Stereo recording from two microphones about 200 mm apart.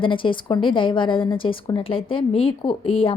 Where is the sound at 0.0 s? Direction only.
25° left (ahead or behind).